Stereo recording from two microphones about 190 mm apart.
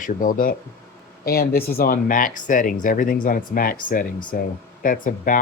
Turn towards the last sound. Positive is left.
turn(degrees=45)  # may be behind; listen again after turning